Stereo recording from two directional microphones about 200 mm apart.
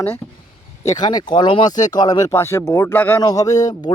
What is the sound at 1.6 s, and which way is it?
Speech, 40° left (ahead or behind).